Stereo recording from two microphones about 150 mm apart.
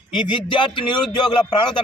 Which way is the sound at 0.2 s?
35° left (ahead or behind).